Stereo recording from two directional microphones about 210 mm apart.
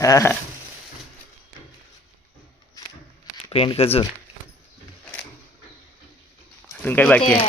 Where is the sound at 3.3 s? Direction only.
25° left (ahead or behind).